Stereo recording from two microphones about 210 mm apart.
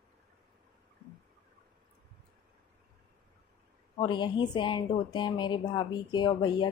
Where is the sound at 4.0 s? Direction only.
20° left (ahead or behind).